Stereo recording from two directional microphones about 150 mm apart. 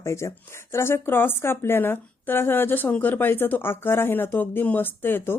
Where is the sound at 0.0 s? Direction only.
20° left (ahead or behind).